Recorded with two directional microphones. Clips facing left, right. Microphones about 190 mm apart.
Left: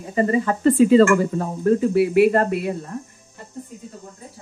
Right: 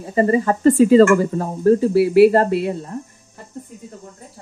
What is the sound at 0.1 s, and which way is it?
Speech, 40° right (ahead or behind).